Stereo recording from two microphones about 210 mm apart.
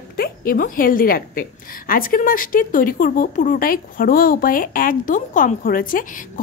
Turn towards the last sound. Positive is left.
turn(degrees=40)  # may be behind; listen again after turning